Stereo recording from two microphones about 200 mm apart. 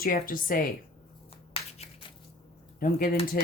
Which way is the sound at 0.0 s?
45° left (ahead or behind).